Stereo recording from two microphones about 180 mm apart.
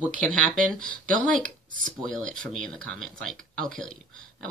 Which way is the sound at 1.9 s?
5° left (ahead or behind).